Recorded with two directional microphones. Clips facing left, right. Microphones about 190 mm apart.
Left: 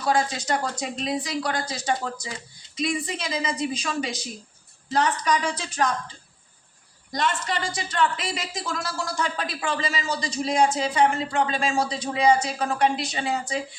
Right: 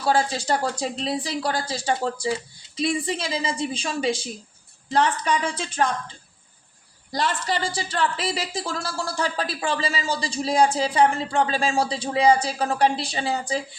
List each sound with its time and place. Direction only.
0.0 s a woman's voice: 30° right (ahead or behind)
7.1 s a woman's voice: 35° right (ahead or behind)